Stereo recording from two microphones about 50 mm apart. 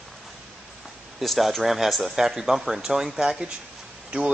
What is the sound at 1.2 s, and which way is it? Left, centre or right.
Speech, centre.